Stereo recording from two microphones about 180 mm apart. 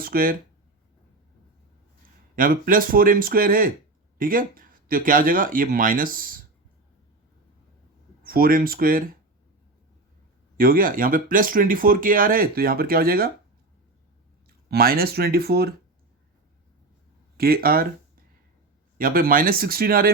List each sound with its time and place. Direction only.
0.0 s speech: 55° right (ahead or behind)
2.3 s speech: 50° right (ahead or behind)
8.2 s speech: 55° right (ahead or behind)
10.6 s speech: 50° right (ahead or behind)
14.7 s speech: 55° right (ahead or behind)
17.3 s speech: 60° right (ahead or behind)
18.9 s speech: 55° right (ahead or behind)